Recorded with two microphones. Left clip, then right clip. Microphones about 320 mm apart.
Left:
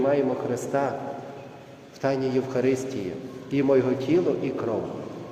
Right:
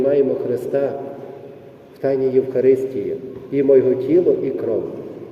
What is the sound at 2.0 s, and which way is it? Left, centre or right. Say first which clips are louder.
A man's voice: right 8 dB; centre.